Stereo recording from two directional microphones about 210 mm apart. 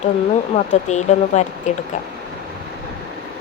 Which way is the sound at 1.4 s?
35° left (ahead or behind).